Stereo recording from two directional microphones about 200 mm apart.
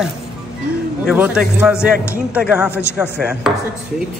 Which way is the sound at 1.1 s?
10° right (ahead or behind).